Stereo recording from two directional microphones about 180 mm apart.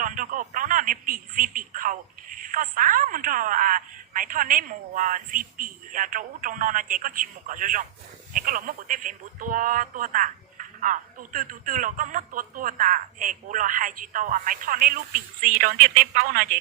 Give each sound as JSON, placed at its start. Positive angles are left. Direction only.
{"t": 0.0, "sound": "speech", "side_deg": -45}